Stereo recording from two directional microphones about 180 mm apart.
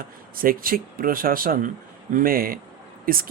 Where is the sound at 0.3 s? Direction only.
55° right (ahead or behind).